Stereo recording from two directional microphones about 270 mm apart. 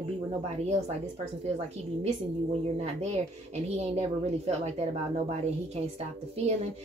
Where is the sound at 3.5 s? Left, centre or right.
Right.